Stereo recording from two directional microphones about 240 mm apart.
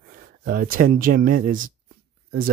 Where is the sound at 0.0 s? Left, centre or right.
Right.